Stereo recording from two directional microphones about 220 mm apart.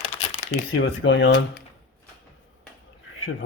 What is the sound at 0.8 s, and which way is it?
Speech, 55° left (ahead or behind).